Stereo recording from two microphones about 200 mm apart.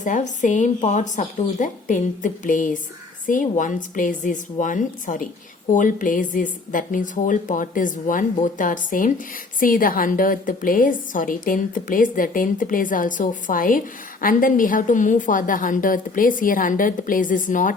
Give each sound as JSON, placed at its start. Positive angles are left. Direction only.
{"t": 0.0, "sound": "a woman's voice", "side_deg": 40}